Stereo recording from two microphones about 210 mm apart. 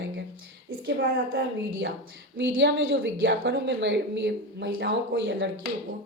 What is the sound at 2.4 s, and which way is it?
A woman's voice, 55° right (ahead or behind).